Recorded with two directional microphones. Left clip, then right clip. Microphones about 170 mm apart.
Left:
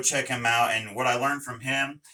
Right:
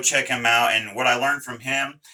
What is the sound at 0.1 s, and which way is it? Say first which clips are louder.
Speech: right 6 dB; 20° left (ahead or behind).